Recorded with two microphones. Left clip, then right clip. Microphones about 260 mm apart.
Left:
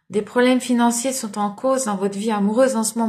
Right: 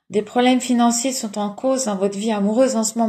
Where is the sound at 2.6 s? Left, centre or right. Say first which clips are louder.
Even; centre.